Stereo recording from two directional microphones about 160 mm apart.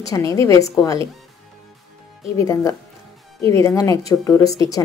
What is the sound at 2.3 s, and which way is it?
A woman's voice, 20° left (ahead or behind).